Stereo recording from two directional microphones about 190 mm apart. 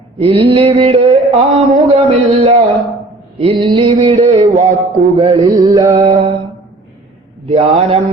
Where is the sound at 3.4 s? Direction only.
25° right (ahead or behind).